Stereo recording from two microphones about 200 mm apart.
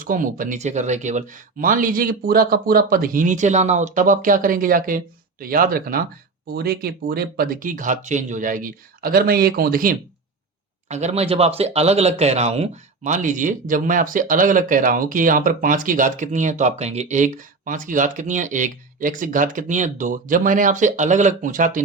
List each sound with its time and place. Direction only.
0.0 s speech: 45° right (ahead or behind)
10.8 s speech: 35° right (ahead or behind)